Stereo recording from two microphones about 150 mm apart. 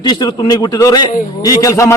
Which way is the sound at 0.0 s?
25° left (ahead or behind).